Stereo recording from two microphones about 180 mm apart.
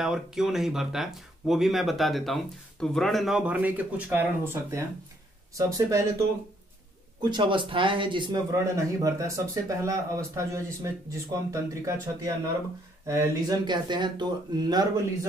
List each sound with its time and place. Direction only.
0.0 s speech: centre (ahead or behind)
7.2 s speech: 25° right (ahead or behind)